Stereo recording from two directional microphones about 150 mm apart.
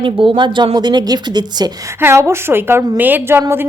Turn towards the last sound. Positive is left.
turn(degrees=-15)  # may be behind; listen again after turning